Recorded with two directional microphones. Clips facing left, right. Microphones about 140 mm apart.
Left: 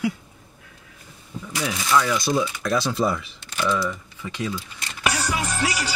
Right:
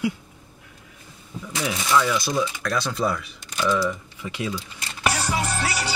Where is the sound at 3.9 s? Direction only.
15° right (ahead or behind).